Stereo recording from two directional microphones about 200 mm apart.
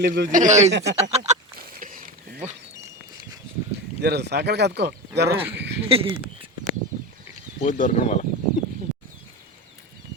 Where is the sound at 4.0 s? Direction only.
55° right (ahead or behind).